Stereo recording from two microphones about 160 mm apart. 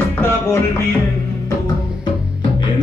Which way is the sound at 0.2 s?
15° left (ahead or behind).